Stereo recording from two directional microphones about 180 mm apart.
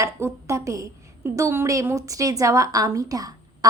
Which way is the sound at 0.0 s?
15° right (ahead or behind).